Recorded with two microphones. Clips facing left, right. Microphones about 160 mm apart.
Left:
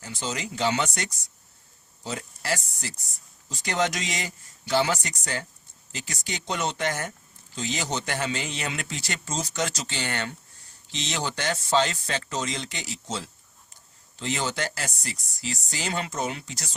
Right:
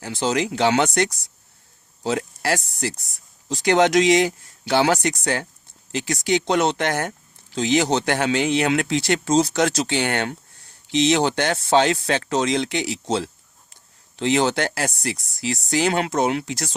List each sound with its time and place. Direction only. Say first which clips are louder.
0.0 s speech: right 10 dB; 75° right (ahead or behind)
2.0 s speech: right 8 dB; 70° right (ahead or behind)